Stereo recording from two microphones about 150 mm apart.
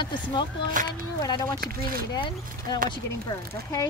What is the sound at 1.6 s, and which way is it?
Speech, 75° right (ahead or behind).